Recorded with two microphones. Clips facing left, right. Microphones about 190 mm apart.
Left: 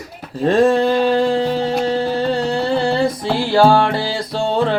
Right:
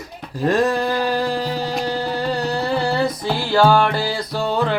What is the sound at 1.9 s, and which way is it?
Music, 25° left (ahead or behind).